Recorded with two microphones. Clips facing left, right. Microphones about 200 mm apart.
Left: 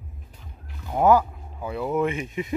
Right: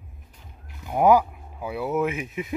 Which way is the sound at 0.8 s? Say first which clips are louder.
Right 1 dB; 15° right (ahead or behind).